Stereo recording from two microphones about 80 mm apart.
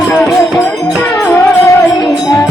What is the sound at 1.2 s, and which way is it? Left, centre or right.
Music, left.